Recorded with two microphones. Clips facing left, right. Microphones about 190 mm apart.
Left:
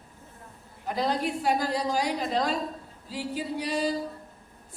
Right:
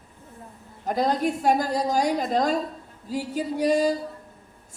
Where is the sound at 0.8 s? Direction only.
45° right (ahead or behind).